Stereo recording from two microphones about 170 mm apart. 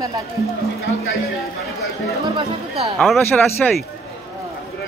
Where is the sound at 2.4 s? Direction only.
35° right (ahead or behind).